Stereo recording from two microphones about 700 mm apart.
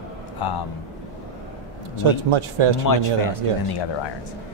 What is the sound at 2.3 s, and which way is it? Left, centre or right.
Speech, right.